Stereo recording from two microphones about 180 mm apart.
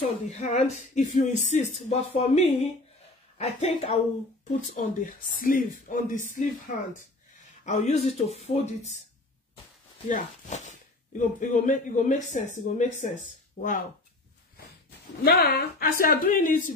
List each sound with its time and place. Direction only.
0.0 s speech: 40° left (ahead or behind)
7.6 s speech: 40° left (ahead or behind)
10.0 s speech: 45° left (ahead or behind)
15.2 s speech: 60° left (ahead or behind)